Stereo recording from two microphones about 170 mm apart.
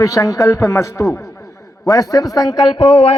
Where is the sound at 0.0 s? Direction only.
20° left (ahead or behind).